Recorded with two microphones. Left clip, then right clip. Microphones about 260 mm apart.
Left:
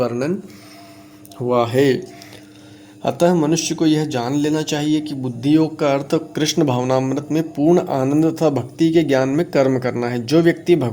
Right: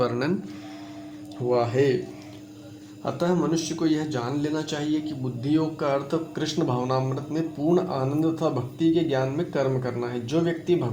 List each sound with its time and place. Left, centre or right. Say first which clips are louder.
0.0 s speech: left 5 dB; centre
1.5 s speech: left 6 dB; left
3.0 s speech: left 9 dB; left